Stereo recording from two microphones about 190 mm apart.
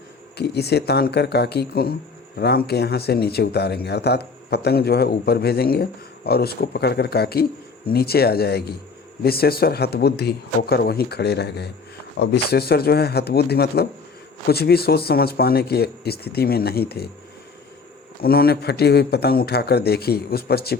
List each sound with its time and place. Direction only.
0.3 s speech: 60° left (ahead or behind)
18.2 s speech: 55° left (ahead or behind)